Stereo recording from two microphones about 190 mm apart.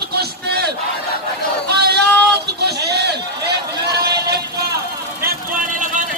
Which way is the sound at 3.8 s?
60° right (ahead or behind).